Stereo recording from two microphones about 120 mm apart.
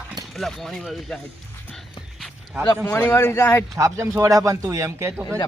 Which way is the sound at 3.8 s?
25° right (ahead or behind).